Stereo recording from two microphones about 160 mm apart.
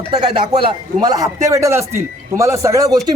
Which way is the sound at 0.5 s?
30° right (ahead or behind).